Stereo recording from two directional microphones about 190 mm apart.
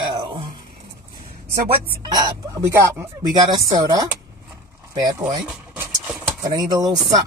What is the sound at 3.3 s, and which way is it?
Speech, 20° right (ahead or behind).